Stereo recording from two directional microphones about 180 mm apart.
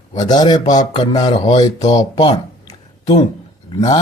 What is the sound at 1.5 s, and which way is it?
Speech, 35° left (ahead or behind).